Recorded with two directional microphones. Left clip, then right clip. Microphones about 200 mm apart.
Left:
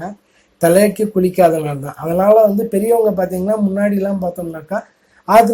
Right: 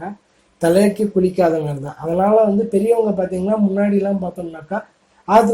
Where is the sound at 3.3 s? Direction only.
25° left (ahead or behind).